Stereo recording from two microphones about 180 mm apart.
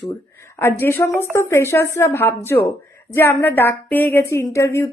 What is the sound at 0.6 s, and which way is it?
A woman's voice, 10° left (ahead or behind).